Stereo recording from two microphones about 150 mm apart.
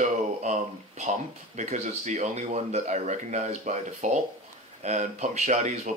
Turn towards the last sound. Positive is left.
turn(degrees=-50)  # may be behind; listen again after turning